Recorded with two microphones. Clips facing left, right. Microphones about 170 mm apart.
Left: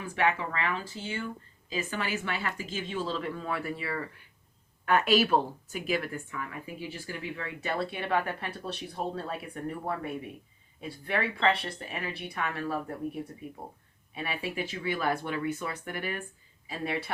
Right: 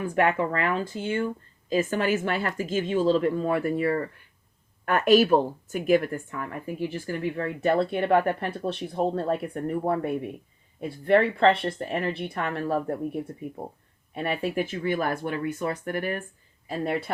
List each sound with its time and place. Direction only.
0.0 s a woman's voice: 50° right (ahead or behind)
10.8 s a woman's voice: 55° right (ahead or behind)
14.1 s a woman's voice: 55° right (ahead or behind)